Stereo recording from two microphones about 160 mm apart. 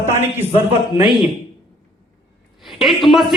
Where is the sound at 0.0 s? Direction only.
15° right (ahead or behind).